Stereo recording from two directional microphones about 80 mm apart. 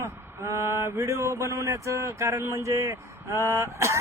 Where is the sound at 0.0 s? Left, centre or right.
Right.